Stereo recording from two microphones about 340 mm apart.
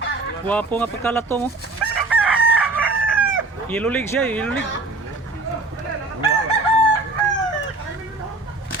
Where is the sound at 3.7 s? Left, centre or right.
Centre.